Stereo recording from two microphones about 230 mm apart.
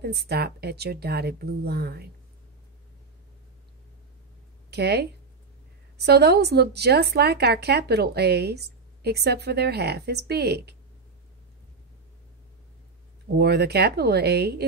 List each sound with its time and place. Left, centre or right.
0.0 s a woman's voice: right
4.6 s a woman's voice: right
13.4 s a woman's voice: right